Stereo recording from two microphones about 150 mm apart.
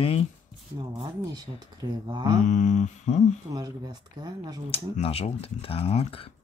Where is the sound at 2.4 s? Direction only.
55° left (ahead or behind).